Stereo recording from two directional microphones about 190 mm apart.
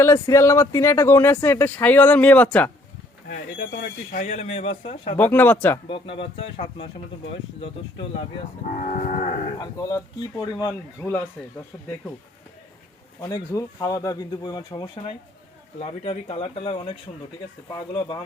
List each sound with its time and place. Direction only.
0.0 s speech: 15° left (ahead or behind)
3.2 s speech: 45° left (ahead or behind)
5.1 s speech: 10° left (ahead or behind)
5.9 s speech: 30° left (ahead or behind)
8.7 s speech: 40° left (ahead or behind)
9.6 s speech: 20° left (ahead or behind)
13.2 s speech: 15° left (ahead or behind)
15.8 s speech: 30° left (ahead or behind)